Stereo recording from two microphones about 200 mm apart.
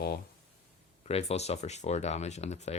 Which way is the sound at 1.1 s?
30° left (ahead or behind).